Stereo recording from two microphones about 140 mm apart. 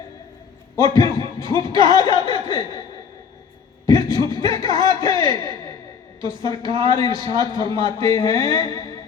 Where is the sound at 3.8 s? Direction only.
25° left (ahead or behind).